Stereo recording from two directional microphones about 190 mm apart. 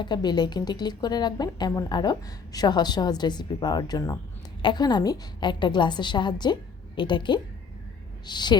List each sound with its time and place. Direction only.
0.0 s a woman's voice: 20° left (ahead or behind)